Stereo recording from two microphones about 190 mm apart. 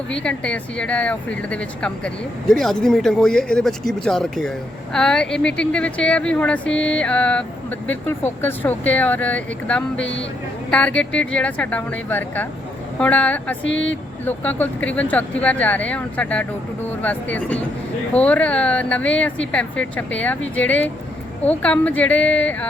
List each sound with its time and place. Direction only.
0.1 s speech: 5° left (ahead or behind)
13.7 s speech: 85° left
13.9 s speech: 10° left (ahead or behind)